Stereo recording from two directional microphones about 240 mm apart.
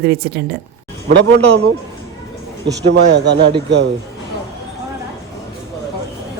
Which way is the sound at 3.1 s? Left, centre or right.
Right.